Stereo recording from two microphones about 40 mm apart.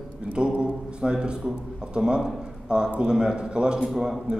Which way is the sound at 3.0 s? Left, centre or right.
Right.